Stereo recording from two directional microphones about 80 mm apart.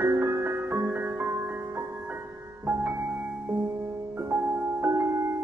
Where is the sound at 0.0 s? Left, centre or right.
Right.